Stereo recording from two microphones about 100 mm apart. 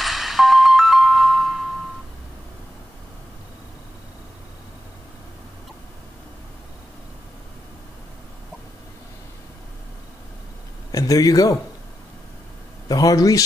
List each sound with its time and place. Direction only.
0.0 s music: centre (ahead or behind)
10.9 s speech: 35° left (ahead or behind)
12.8 s speech: 40° left (ahead or behind)